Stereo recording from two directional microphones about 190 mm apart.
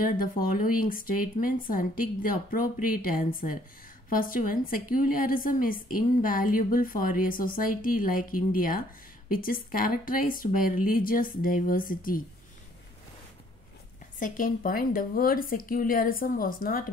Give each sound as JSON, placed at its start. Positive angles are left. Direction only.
{"t": 0.0, "sound": "a woman's voice", "side_deg": 50}
{"t": 14.2, "sound": "a woman's voice", "side_deg": 45}